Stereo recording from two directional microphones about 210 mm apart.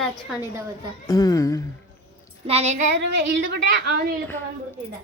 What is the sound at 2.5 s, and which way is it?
Child singing, 30° right (ahead or behind).